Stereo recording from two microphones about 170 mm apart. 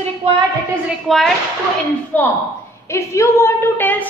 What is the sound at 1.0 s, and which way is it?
A woman's voice, centre (ahead or behind).